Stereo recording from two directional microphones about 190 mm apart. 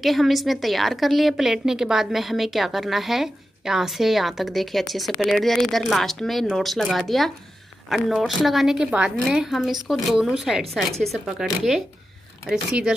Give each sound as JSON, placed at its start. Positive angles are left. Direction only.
{"t": 0.0, "sound": "a woman's voice", "side_deg": 0}